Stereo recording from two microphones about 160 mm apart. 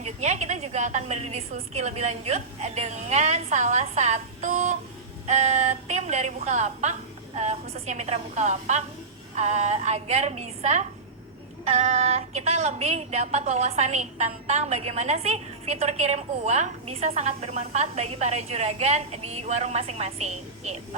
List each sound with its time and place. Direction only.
0.0 s a woman's voice: 45° right (ahead or behind)